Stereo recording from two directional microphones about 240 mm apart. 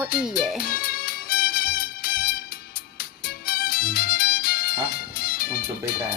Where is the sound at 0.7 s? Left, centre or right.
Left.